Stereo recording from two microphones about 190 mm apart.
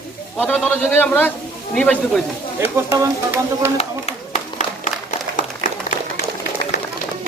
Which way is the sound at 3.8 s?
30° left (ahead or behind).